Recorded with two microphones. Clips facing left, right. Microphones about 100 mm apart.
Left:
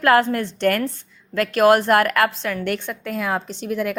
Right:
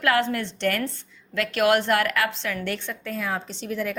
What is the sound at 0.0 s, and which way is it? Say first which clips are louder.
A woman's voice: left 6 dB; 45° left (ahead or behind).